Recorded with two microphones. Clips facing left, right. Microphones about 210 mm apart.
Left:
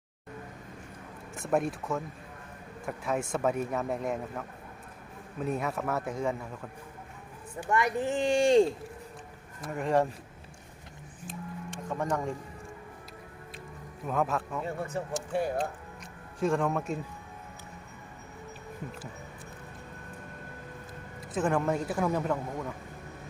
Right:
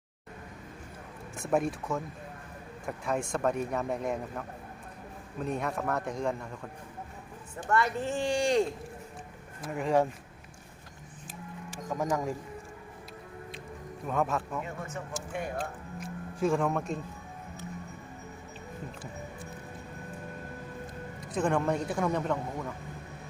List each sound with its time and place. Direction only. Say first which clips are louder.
1.4 s speech: even; centre (ahead or behind)
7.7 s speech: left 1 dB; 15° left (ahead or behind)
9.6 s speech: even; centre (ahead or behind)
11.3 s music: left 4 dB; 5° right (ahead or behind)
14.1 s speech: even; centre (ahead or behind)
14.6 s speech: left 5 dB; 35° left (ahead or behind)
16.0 s music: right 1 dB; centre (ahead or behind)
21.3 s speech: even; centre (ahead or behind)